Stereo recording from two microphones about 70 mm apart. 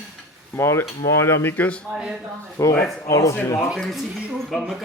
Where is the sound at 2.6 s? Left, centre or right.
Left.